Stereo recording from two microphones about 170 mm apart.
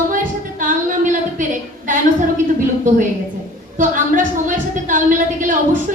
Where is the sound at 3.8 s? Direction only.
50° right (ahead or behind).